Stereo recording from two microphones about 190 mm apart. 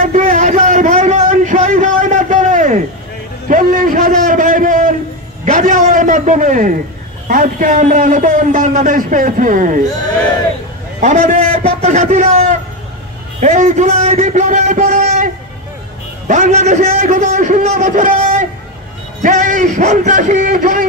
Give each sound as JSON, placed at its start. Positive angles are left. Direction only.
{"t": 0.0, "sound": "a sound", "side_deg": -45}
{"t": 3.4, "sound": "a man's voice", "side_deg": -45}
{"t": 11.0, "sound": "a man's voice", "side_deg": -45}
{"t": 16.3, "sound": "a man's voice", "side_deg": -40}